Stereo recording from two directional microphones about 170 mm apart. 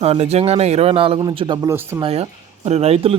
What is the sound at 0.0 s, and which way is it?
Speech, 35° right (ahead or behind).